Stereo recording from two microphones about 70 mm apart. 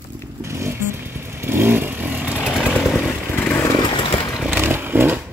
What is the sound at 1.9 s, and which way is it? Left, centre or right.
Vehicle, right.